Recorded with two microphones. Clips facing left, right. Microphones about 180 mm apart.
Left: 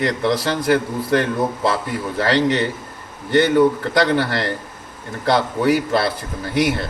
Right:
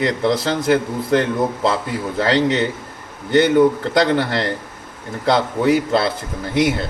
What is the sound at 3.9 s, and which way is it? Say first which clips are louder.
Speech: right 1 dB; 20° right (ahead or behind).